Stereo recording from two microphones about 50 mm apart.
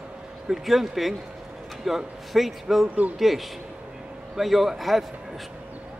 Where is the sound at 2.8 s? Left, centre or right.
Right.